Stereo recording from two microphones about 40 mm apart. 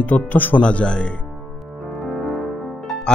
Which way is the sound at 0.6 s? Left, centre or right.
Left.